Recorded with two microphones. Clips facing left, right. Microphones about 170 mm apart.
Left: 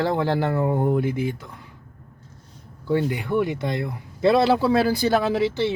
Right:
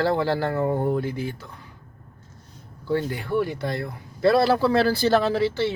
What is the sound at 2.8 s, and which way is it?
Speech, 20° left (ahead or behind).